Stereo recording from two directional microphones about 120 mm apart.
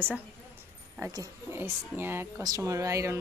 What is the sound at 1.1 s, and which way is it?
A woman's voice, 25° right (ahead or behind).